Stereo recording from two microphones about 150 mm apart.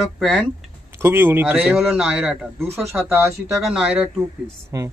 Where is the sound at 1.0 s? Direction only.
15° right (ahead or behind).